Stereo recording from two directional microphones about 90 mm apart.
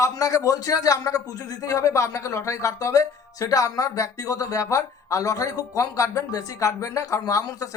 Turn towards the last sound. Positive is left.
turn(degrees=40)  # may be behind; listen again after turning